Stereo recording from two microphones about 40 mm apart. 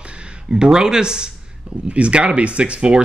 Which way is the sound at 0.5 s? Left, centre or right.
Centre.